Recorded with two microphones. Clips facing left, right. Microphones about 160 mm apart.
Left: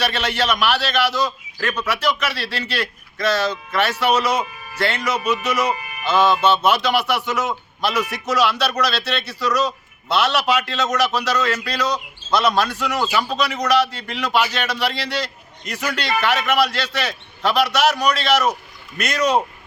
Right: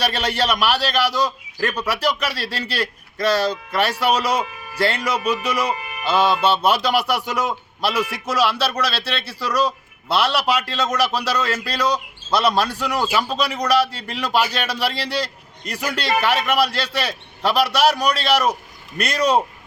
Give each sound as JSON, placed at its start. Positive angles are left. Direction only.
{"t": 0.0, "sound": "a man's voice", "side_deg": -35}
{"t": 1.1, "sound": "a man's voice", "side_deg": -10}
{"t": 1.6, "sound": "a man's voice", "side_deg": -35}